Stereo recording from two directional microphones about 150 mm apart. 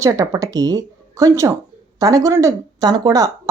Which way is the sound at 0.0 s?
20° right (ahead or behind).